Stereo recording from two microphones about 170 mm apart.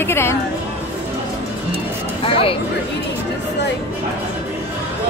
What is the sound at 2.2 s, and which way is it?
Speech, 30° left (ahead or behind).